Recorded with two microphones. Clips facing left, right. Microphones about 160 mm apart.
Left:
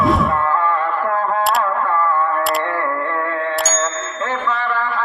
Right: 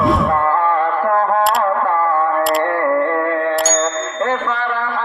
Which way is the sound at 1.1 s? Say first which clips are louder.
Right 5 dB; 50° right (ahead or behind).